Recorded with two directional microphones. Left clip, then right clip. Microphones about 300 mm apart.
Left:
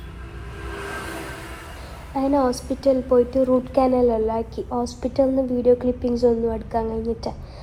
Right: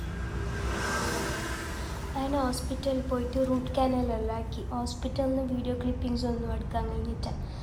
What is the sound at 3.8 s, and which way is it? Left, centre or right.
Speech, left.